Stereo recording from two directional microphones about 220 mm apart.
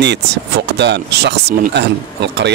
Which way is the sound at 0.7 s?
50° right (ahead or behind).